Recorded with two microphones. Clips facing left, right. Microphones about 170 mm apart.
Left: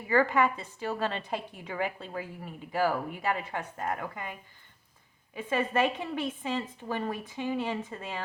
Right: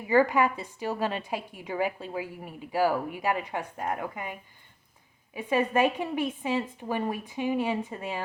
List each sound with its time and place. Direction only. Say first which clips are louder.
0.1 s a woman's voice: right 2 dB; 15° right (ahead or behind)